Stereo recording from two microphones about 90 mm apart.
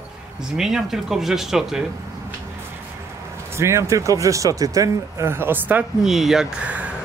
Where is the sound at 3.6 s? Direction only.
30° right (ahead or behind).